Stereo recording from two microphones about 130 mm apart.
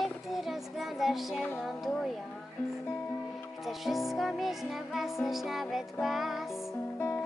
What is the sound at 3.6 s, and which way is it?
Music, centre (ahead or behind).